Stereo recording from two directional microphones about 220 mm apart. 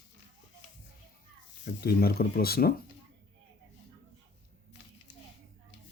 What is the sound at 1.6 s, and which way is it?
Speech, 45° left (ahead or behind).